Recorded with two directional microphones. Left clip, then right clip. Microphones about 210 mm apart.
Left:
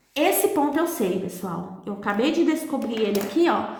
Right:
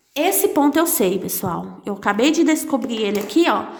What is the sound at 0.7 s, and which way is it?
A woman's voice, 55° right (ahead or behind).